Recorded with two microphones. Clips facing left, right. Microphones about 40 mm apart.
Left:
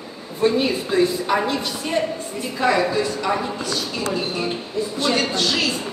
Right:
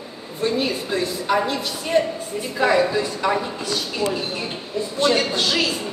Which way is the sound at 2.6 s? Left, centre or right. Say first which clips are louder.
Right 1 dB; centre.